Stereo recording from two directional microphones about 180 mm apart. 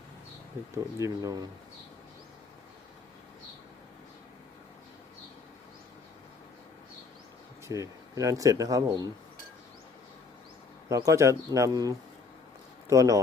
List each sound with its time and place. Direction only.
1.0 s speech: 20° right (ahead or behind)
7.7 s speech: 20° right (ahead or behind)
10.8 s speech: 15° right (ahead or behind)